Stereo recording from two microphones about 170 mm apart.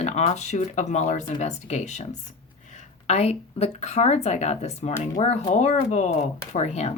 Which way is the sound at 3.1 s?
40° left (ahead or behind).